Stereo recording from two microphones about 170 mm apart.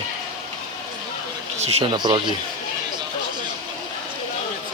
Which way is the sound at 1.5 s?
40° right (ahead or behind).